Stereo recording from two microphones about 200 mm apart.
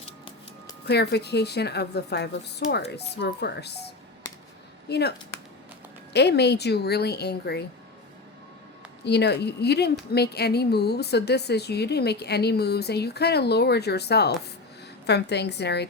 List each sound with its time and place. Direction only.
0.9 s a woman's voice: 55° left (ahead or behind)
4.9 s a woman's voice: 55° left (ahead or behind)
6.1 s a woman's voice: 55° left (ahead or behind)
9.0 s a woman's voice: 55° left (ahead or behind)